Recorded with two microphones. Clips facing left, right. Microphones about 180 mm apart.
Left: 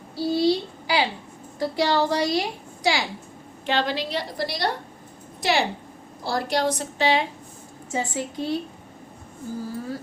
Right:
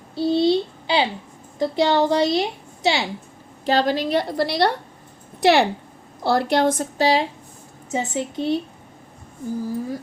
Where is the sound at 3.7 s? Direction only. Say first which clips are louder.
Right 5 dB; 40° right (ahead or behind).